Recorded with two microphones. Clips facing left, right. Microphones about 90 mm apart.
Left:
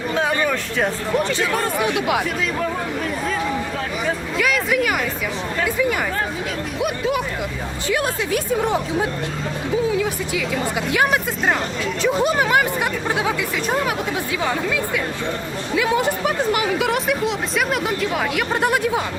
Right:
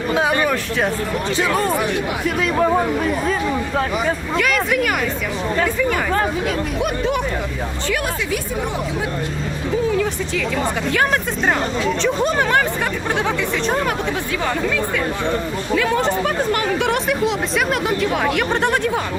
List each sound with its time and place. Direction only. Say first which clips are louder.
0.1 s a sound: right 3 dB; 10° right (ahead or behind)
2.4 s speech: right 6 dB; 50° right (ahead or behind)
4.4 s speech: right 1 dB; centre (ahead or behind)
6.7 s speech: left 2 dB; 5° left (ahead or behind)
8.3 s speech: left 3 dB; 40° left (ahead or behind)
10.9 s speech: left 1 dB; 10° left (ahead or behind)